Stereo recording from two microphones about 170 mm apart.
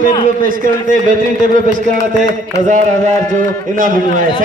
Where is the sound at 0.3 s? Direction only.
55° right (ahead or behind).